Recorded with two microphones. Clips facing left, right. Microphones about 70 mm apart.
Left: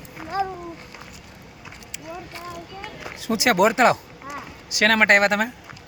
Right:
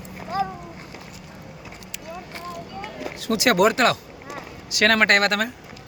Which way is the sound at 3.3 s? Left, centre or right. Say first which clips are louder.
Even; centre.